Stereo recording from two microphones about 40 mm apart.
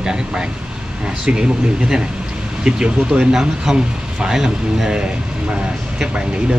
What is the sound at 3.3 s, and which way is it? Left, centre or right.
A man's voice, centre.